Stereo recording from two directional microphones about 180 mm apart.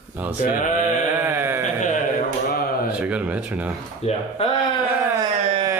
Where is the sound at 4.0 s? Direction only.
35° left (ahead or behind).